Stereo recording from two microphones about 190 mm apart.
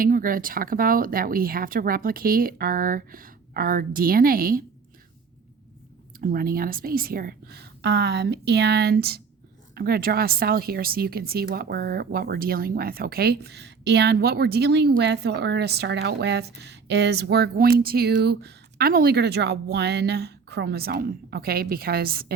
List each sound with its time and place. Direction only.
0.0 s speech: 45° right (ahead or behind)
6.1 s a woman's voice: 50° right (ahead or behind)